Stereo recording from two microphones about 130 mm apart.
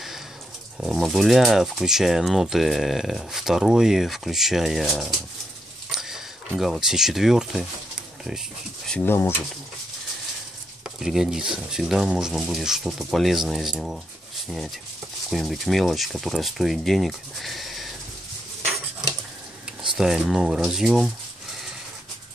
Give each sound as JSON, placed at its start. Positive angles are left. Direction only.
{"t": 0.7, "sound": "speech", "side_deg": 0}
{"t": 8.9, "sound": "speech", "side_deg": 15}
{"t": 11.0, "sound": "speech", "side_deg": -5}
{"t": 15.2, "sound": "speech", "side_deg": 0}
{"t": 20.0, "sound": "speech", "side_deg": -5}